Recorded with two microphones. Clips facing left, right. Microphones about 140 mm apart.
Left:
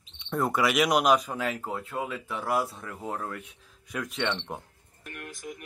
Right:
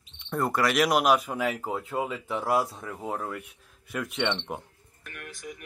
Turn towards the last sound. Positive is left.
turn(degrees=-5)  # may be behind; listen again after turning